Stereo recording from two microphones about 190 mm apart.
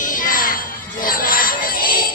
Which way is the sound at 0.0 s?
45° left (ahead or behind).